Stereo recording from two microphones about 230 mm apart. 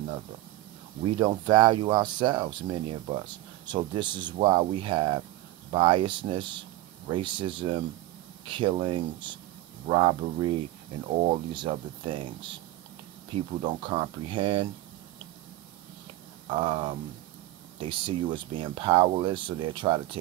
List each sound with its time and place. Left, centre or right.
1.0 s speech: right
16.4 s speech: right